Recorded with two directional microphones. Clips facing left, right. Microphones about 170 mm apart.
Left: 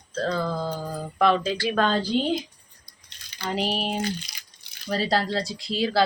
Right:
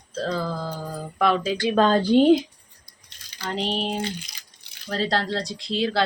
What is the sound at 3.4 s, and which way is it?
Speech, 5° left (ahead or behind).